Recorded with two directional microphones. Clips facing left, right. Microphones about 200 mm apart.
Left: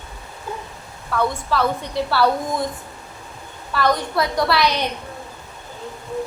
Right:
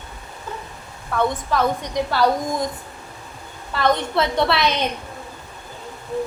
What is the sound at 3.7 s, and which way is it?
A woman's voice, 25° right (ahead or behind).